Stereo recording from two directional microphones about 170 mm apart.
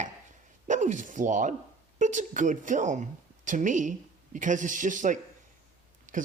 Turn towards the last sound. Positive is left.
turn(degrees=-50)  # may be behind; listen again after turning